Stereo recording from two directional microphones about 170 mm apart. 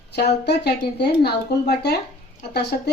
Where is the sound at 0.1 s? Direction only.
80° left.